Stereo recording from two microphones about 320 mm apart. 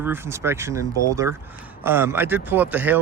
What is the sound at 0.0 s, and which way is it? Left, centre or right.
Speech, centre.